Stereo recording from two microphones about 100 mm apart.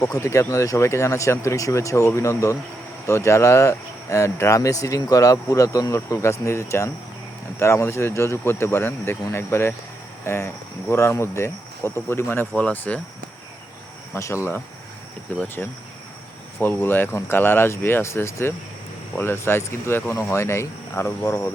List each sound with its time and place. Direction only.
0.0 s speech: 35° left (ahead or behind); by 13.0 s 15° left (ahead or behind)
14.1 s speech: 30° left (ahead or behind)
15.3 s speech: 15° left (ahead or behind)
16.6 s speech: 20° left (ahead or behind)